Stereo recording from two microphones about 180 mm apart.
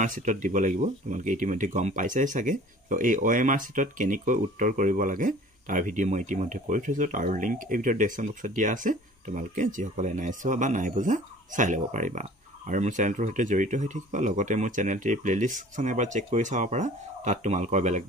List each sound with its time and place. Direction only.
0.0 s speech: 45° right (ahead or behind)